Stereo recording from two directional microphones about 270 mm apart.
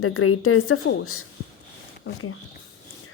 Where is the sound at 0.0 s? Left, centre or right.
Left.